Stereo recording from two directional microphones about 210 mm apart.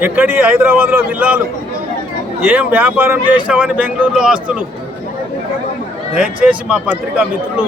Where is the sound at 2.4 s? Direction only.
10° right (ahead or behind).